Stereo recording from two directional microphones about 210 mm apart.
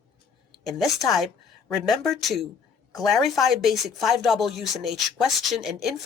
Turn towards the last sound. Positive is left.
turn(degrees=0)  # may be behind; listen again after turning